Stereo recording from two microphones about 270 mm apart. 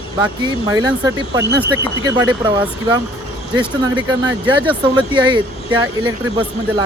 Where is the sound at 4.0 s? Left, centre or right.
Centre.